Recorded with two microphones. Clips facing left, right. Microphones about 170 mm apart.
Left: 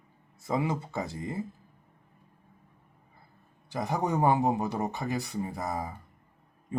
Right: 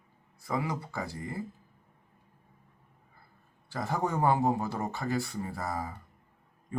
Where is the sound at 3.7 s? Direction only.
15° left (ahead or behind).